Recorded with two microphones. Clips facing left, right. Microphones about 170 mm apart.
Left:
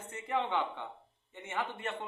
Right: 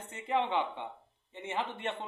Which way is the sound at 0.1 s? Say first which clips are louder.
Right 2 dB; 20° right (ahead or behind).